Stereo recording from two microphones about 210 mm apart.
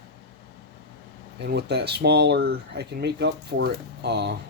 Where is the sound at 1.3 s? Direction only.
50° right (ahead or behind).